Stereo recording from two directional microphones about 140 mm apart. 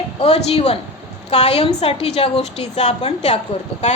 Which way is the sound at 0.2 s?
50° left (ahead or behind).